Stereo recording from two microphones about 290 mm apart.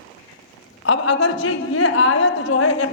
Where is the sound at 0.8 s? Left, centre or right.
Left.